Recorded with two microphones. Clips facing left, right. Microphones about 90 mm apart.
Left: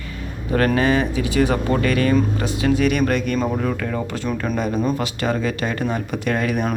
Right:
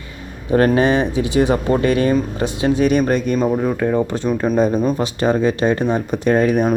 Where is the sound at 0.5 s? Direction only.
25° right (ahead or behind).